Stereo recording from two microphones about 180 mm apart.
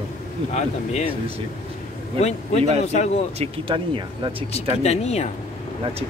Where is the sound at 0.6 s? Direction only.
40° left (ahead or behind).